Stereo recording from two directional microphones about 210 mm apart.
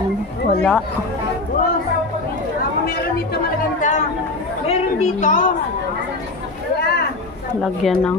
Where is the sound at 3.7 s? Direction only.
35° left (ahead or behind).